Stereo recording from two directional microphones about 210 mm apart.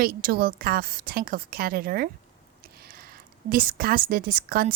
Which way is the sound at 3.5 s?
40° right (ahead or behind).